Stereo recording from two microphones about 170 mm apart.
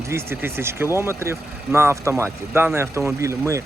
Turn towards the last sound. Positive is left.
turn(degrees=-15)  # may be behind; listen again after turning